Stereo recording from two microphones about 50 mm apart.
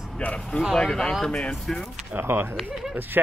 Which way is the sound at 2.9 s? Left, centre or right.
Right.